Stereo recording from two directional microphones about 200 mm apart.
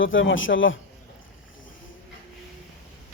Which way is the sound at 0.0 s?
75° left (ahead or behind).